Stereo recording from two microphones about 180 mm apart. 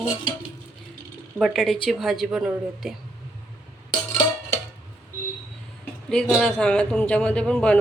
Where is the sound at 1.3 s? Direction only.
Centre (ahead or behind).